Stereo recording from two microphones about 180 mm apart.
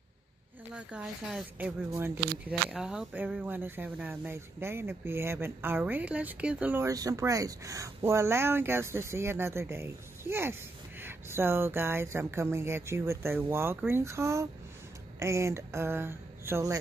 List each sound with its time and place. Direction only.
0.7 s speech: 5° right (ahead or behind)
2.7 s speech: 5° right (ahead or behind)